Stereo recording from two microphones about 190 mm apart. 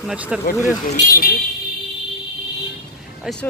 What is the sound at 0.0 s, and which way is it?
Speech, 5° right (ahead or behind).